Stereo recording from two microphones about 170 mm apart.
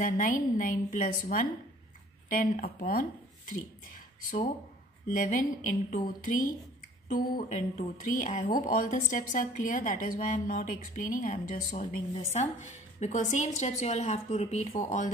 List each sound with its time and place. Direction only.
0.0 s a woman's voice: 50° left (ahead or behind)
2.2 s a woman's voice: 50° left (ahead or behind)